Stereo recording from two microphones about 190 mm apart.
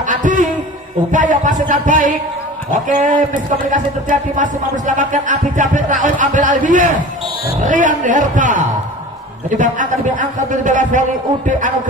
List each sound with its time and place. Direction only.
0.0 s a sound: 40° right (ahead or behind)
1.1 s music: 40° right (ahead or behind)
2.7 s a man's voice: 40° right (ahead or behind)
3.7 s music: 40° right (ahead or behind)
9.6 s a man's voice: 40° right (ahead or behind)